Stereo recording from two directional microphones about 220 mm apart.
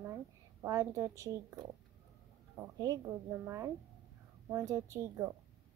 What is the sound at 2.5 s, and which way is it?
A woman's voice, 15° right (ahead or behind).